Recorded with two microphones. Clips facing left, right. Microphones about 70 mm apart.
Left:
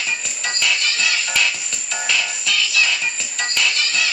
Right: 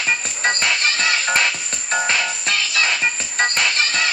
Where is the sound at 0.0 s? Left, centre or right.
Right.